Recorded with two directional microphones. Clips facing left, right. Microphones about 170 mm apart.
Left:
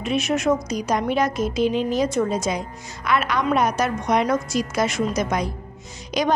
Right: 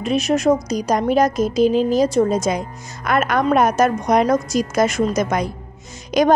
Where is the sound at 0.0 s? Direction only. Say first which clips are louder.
Right 4 dB; 40° right (ahead or behind).